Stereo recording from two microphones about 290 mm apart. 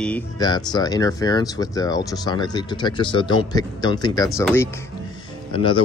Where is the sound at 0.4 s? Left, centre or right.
Centre.